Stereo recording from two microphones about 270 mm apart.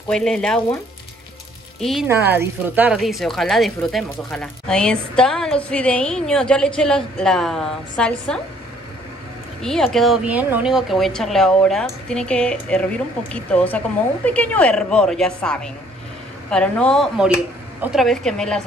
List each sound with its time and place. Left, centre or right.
0.1 s speech: centre
1.8 s speech: centre
9.6 s speech: centre